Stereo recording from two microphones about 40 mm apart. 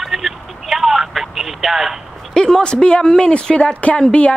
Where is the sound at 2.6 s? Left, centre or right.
Left.